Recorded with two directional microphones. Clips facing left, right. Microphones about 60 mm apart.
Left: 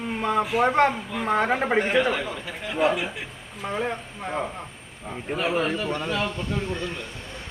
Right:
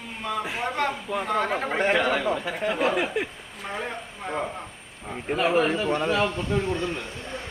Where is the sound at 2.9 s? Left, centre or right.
Right.